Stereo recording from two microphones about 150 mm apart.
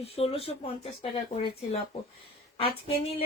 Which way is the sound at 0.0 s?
40° left (ahead or behind).